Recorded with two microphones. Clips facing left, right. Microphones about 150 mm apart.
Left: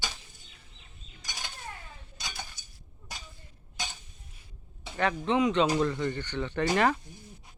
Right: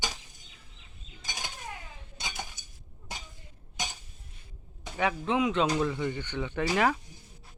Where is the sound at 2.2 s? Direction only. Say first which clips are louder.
Right 3 dB; 20° right (ahead or behind).